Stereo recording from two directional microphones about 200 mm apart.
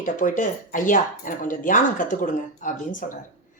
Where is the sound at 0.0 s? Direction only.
40° left (ahead or behind).